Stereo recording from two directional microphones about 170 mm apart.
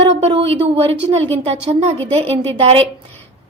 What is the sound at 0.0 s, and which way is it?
A woman's voice, 35° right (ahead or behind).